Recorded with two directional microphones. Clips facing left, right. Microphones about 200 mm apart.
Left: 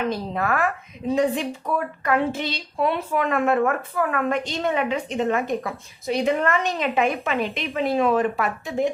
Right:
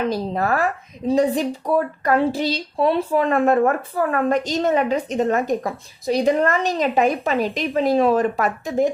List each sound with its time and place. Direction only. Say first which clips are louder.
0.1 s speech: right 3 dB; 35° right (ahead or behind)